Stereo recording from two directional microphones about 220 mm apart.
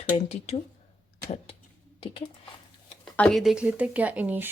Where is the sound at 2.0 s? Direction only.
25° left (ahead or behind).